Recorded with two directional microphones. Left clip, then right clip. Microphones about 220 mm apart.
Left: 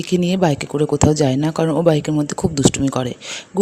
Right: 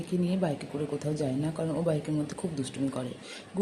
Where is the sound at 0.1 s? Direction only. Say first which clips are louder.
Left 13 dB; 45° left (ahead or behind).